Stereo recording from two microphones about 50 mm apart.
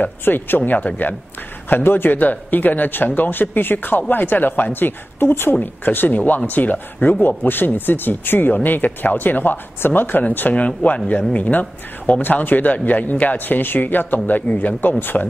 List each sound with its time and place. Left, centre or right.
0.0 s speech: left
0.6 s speech: left
1.7 s speech: left